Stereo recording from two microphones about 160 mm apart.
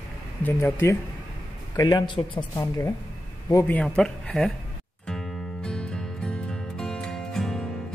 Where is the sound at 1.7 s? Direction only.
25° left (ahead or behind).